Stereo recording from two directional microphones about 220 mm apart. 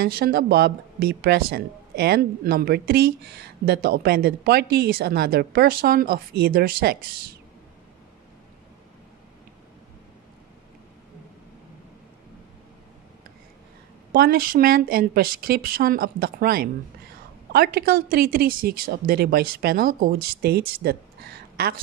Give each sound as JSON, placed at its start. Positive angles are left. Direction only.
{"t": 0.0, "sound": "speech", "side_deg": -45}
{"t": 14.1, "sound": "speech", "side_deg": -40}